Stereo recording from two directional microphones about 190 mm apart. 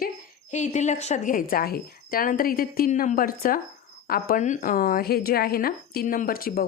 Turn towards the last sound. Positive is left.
turn(degrees=50)  # may be behind; listen again after turning